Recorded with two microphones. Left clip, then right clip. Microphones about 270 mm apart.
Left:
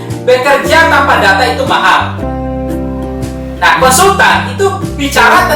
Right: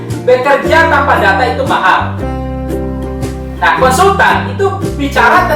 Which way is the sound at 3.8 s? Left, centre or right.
Right.